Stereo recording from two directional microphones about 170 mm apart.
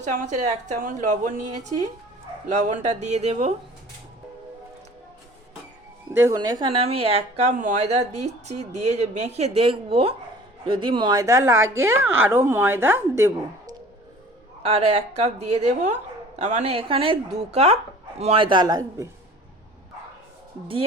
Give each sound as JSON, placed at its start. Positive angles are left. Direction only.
{"t": 0.0, "sound": "a woman's voice", "side_deg": -50}
{"t": 6.1, "sound": "a woman's voice", "side_deg": -20}
{"t": 14.6, "sound": "a man's voice", "side_deg": -40}